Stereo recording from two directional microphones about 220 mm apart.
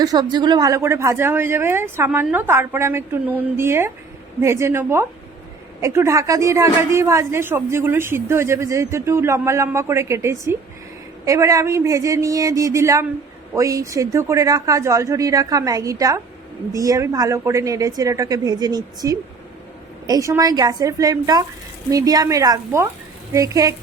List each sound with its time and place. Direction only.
0.0 s a woman's voice: 20° right (ahead or behind)